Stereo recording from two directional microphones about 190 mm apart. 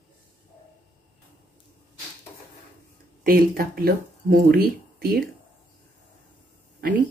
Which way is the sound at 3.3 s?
50° right (ahead or behind).